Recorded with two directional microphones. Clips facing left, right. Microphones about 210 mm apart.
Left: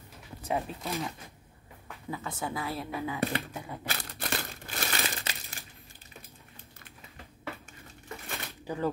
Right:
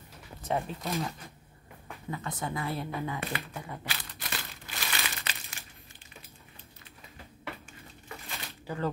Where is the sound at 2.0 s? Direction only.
5° left (ahead or behind).